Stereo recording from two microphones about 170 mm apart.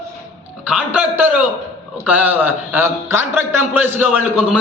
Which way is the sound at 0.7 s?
10° right (ahead or behind).